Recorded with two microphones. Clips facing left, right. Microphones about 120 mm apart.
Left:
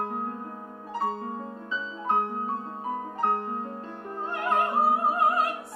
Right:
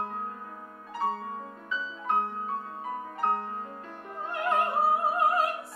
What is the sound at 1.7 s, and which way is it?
Music, 30° left (ahead or behind).